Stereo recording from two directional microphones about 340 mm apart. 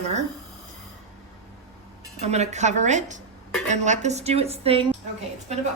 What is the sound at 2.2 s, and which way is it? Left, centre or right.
A woman's voice, centre.